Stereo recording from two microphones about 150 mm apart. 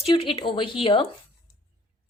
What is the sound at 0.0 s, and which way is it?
Speech, 40° left (ahead or behind).